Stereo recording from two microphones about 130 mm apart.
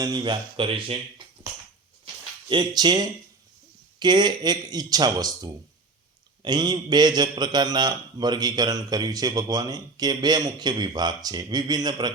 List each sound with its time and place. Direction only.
0.0 s a man's voice: 30° right (ahead or behind)
2.5 s a man's voice: 35° right (ahead or behind)